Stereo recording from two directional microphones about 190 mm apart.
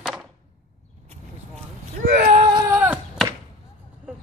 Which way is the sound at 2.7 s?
5° right (ahead or behind).